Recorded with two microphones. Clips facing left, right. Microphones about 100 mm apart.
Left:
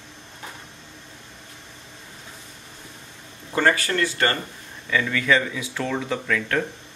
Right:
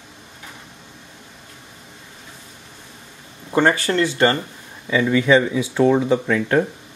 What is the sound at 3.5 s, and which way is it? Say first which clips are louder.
Speech: right 4 dB; 20° right (ahead or behind).